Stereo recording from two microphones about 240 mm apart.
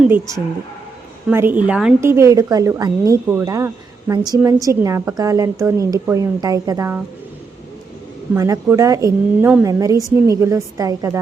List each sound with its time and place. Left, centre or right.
0.0 s a woman's voice: centre
8.3 s a woman's voice: centre